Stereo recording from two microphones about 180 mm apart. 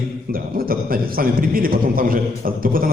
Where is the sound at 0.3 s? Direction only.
55° right (ahead or behind).